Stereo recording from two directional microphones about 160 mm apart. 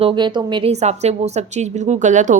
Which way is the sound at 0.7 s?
45° right (ahead or behind).